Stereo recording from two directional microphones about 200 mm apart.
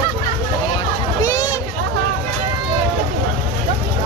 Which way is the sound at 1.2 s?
20° left (ahead or behind).